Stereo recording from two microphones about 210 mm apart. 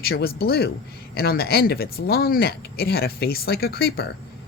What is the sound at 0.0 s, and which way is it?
Speech, 45° left (ahead or behind).